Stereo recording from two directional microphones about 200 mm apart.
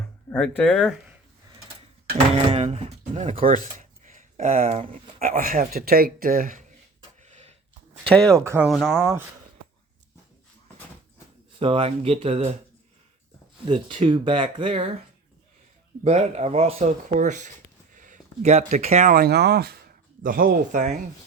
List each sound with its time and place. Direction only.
0.3 s speech: 5° left (ahead or behind)
2.3 s speech: 30° right (ahead or behind)
7.2 s a sound: 35° right (ahead or behind)
8.1 s speech: 5° left (ahead or behind)
8.4 s speech: 10° right (ahead or behind)
11.6 s speech: 30° right (ahead or behind)
13.7 s speech: 25° right (ahead or behind)
16.0 s speech: 35° right (ahead or behind)